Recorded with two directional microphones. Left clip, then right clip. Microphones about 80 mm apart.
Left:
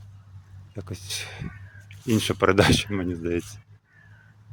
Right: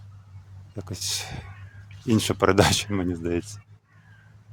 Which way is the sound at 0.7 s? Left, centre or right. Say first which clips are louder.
Right 4 dB; centre.